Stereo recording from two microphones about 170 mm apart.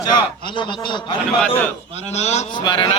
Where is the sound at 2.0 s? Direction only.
40° left (ahead or behind).